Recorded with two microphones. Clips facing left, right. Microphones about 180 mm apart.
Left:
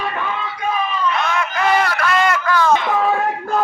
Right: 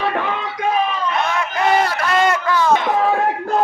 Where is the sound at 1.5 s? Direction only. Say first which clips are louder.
Right 1 dB; 25° right (ahead or behind).